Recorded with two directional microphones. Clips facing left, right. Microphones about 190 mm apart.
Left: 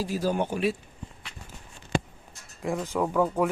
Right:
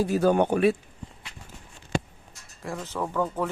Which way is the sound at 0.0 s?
60° right (ahead or behind).